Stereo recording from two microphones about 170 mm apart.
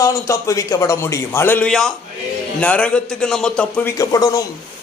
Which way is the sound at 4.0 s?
20° left (ahead or behind).